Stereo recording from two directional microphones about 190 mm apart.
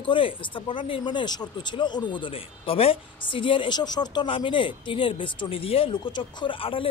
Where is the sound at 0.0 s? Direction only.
25° left (ahead or behind).